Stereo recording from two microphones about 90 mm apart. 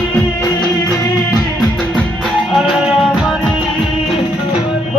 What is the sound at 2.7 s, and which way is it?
Music, 5° right (ahead or behind).